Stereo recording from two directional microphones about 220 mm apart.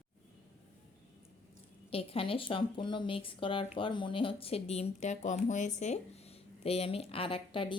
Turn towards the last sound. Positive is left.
turn(degrees=25)  # may be behind; listen again after turning